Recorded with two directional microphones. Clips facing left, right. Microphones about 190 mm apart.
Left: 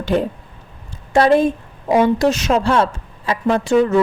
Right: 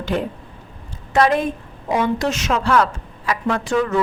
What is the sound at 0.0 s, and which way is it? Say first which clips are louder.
A woman's voice: left 4 dB; 35° left (ahead or behind).